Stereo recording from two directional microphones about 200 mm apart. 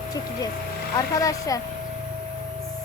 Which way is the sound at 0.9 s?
15° left (ahead or behind).